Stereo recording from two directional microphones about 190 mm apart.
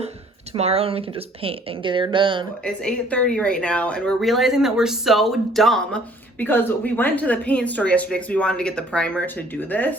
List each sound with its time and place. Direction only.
0.5 s speech: 30° right (ahead or behind)
2.6 s speech: 5° left (ahead or behind)